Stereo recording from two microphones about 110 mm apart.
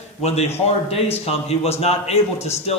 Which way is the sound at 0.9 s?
65° left (ahead or behind).